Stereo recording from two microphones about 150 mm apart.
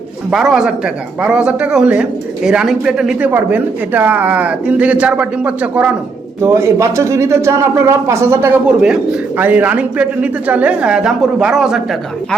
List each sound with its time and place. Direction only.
0.3 s a man's voice: 5° right (ahead or behind)